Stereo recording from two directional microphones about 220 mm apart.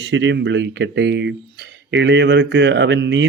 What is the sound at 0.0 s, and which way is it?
Speech, 55° right (ahead or behind).